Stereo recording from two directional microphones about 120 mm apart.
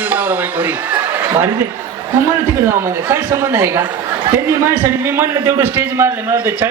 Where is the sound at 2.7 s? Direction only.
20° right (ahead or behind).